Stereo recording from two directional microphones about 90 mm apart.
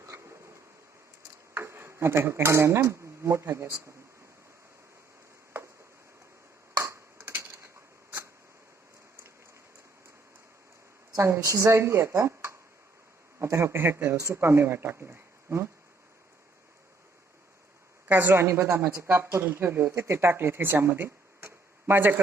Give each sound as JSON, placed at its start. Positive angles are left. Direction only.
{"t": 0.0, "sound": "a sound", "side_deg": -35}
{"t": 1.5, "sound": "cutlery", "side_deg": -25}
{"t": 6.7, "sound": "tick-tock", "side_deg": -30}
{"t": 7.2, "sound": "typewriter", "side_deg": -20}
{"t": 11.1, "sound": "speech", "side_deg": -40}
{"t": 18.1, "sound": "speech", "side_deg": -20}